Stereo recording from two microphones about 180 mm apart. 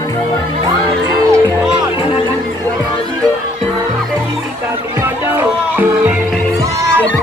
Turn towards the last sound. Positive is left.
turn(degrees=-10)  # may be behind; listen again after turning